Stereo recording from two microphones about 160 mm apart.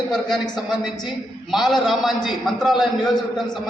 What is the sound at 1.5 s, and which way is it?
A man's voice, centre (ahead or behind).